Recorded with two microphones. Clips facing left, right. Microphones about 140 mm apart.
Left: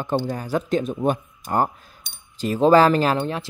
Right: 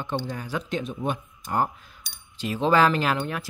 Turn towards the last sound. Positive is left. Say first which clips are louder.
# left 5 dB
turn(degrees=25)  # may be behind; listen again after turning